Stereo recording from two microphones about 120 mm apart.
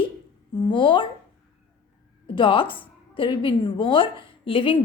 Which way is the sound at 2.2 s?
45° left (ahead or behind).